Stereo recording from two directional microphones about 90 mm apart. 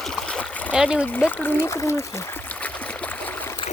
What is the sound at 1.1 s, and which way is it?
Speech, 20° left (ahead or behind).